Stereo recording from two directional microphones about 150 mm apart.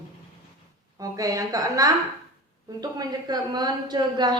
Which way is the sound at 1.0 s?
25° right (ahead or behind).